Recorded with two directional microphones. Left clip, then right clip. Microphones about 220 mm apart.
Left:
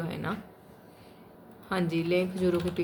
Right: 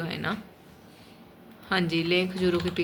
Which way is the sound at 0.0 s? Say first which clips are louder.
Right 3 dB; 5° left (ahead or behind).